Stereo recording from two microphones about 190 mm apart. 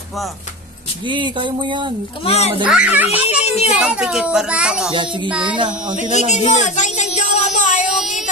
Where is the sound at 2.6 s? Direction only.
5° right (ahead or behind).